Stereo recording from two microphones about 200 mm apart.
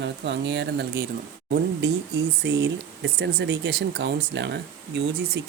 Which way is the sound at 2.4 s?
60° right (ahead or behind).